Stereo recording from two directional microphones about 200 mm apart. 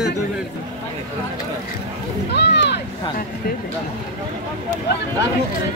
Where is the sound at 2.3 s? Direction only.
60° left (ahead or behind).